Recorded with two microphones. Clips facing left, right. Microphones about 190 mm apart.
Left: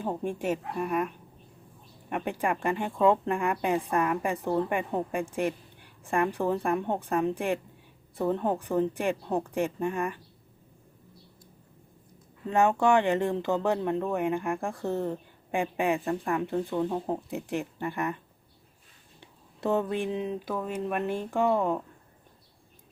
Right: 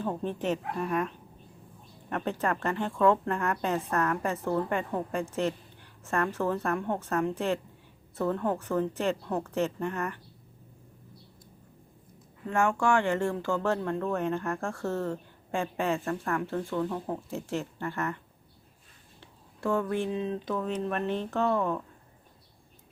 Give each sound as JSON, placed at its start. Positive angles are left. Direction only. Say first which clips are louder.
{"t": 0.0, "sound": "speech", "louder": "left 1 dB", "side_deg": 15}
{"t": 12.5, "sound": "speech", "louder": "left 3 dB", "side_deg": 20}
{"t": 19.2, "sound": "speech", "louder": "left 1 dB", "side_deg": 20}